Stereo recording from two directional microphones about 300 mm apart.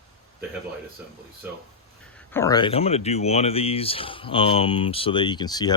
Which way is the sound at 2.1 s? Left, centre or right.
Centre.